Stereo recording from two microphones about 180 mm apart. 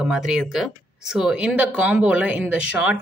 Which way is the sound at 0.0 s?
5° right (ahead or behind).